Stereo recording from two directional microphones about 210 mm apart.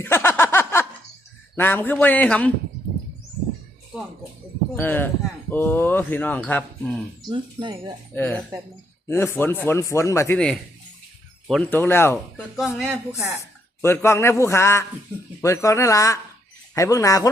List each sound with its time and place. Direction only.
0.0 s a sound: 10° left (ahead or behind)
1.5 s speech: 10° left (ahead or behind)
4.8 s speech: 10° left (ahead or behind)
7.3 s speech: 20° right (ahead or behind)
8.1 s speech: 10° left (ahead or behind)
12.5 s speech: centre (ahead or behind)
13.4 s speech: 10° left (ahead or behind)